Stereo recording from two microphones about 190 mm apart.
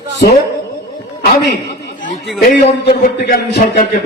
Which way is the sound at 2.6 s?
35° left (ahead or behind).